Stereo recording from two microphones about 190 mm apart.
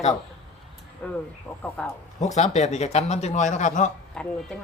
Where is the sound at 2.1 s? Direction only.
35° left (ahead or behind).